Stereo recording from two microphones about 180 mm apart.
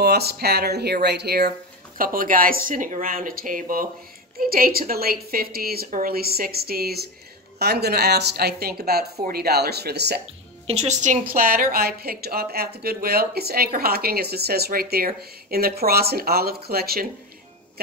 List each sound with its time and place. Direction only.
0.0 s a woman's voice: 60° right (ahead or behind)
2.0 s a woman's voice: 50° right (ahead or behind); by 10.2 s 65° right (ahead or behind)
10.7 s a woman's voice: 35° right (ahead or behind); by 17.1 s 55° right (ahead or behind)